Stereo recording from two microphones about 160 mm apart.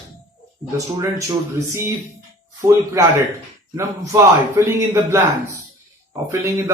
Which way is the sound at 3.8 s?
20° right (ahead or behind).